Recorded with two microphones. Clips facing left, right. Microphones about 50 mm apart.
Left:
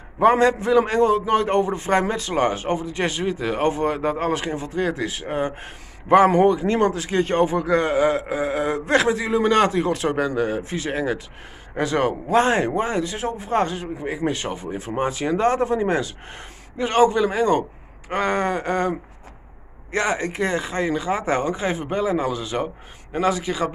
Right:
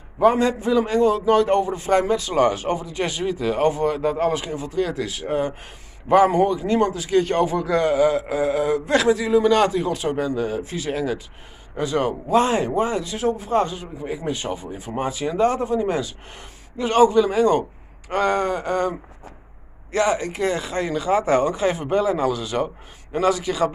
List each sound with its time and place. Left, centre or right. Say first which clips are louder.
0.2 s speech: left 1 dB; left
1.5 s speech: right 1 dB; left
2.3 s speech: right 1 dB; left
7.1 s speech: right 1 dB; left
8.3 s speech: right 2 dB; left
8.6 s speech: right 2 dB; left
8.9 s speech: right 1 dB; left
9.9 s speech: left 1 dB; left
10.4 s speech: left 1 dB; left
11.7 s speech: left 1 dB; left
15.0 s speech: right 1 dB; left; by 23.7 s centre